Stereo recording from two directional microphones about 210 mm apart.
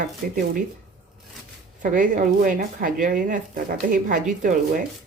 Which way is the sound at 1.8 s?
40° right (ahead or behind).